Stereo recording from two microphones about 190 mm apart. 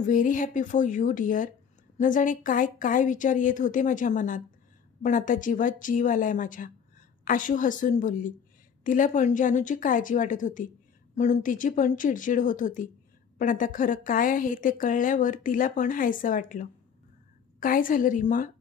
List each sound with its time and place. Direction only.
0.0 s speech: 45° left (ahead or behind)